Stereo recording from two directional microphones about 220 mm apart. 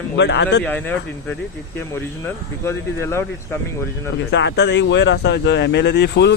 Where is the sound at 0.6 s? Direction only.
10° left (ahead or behind).